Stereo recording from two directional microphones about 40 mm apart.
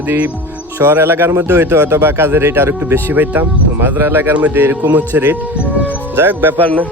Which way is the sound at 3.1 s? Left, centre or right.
Right.